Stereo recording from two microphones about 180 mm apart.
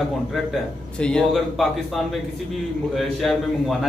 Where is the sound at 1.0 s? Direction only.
5° left (ahead or behind).